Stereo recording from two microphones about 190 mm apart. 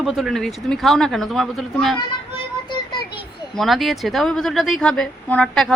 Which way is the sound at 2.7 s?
25° left (ahead or behind).